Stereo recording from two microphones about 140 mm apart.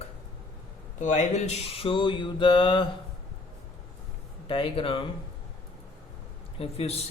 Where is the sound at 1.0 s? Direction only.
60° left (ahead or behind); by 2.8 s 35° left (ahead or behind).